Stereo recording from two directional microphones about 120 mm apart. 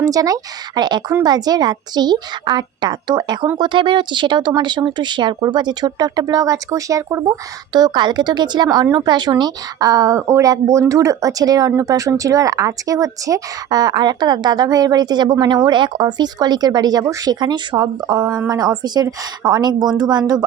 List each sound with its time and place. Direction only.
0.0 s speech: 30° right (ahead or behind)
7.7 s speech: 35° right (ahead or behind)